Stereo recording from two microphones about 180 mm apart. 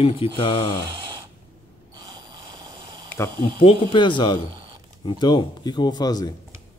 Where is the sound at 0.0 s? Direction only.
30° left (ahead or behind).